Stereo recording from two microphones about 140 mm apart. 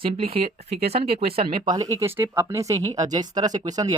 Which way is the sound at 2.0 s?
15° right (ahead or behind).